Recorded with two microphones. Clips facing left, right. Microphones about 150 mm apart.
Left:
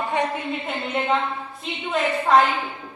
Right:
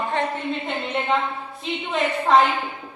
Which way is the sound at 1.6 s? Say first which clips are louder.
Even; centre (ahead or behind).